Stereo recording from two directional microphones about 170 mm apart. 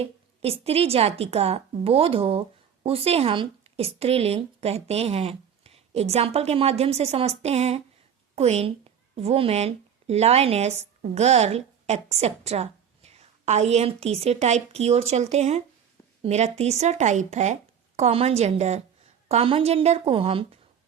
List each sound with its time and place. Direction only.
0.0 s a woman's voice: 35° right (ahead or behind)